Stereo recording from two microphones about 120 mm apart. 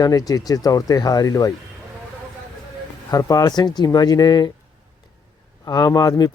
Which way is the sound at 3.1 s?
30° left (ahead or behind).